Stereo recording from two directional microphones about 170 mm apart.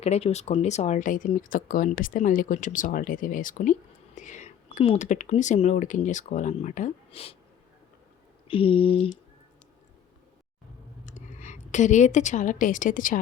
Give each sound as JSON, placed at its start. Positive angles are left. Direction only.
{"t": 0.0, "sound": "speech", "side_deg": 40}
{"t": 8.4, "sound": "a sound", "side_deg": 30}
{"t": 11.0, "sound": "a woman's voice", "side_deg": 45}